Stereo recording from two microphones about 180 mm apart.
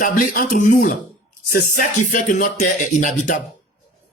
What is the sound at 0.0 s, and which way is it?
Speech, 50° left (ahead or behind).